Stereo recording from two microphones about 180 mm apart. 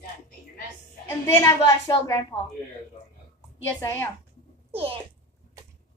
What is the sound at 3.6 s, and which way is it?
Speech, 10° left (ahead or behind).